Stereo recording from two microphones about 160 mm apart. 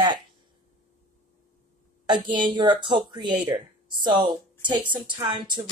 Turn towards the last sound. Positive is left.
turn(degrees=-30)  # may be behind; listen again after turning